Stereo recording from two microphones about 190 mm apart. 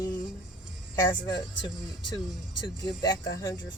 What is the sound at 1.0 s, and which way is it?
Speech, 20° left (ahead or behind).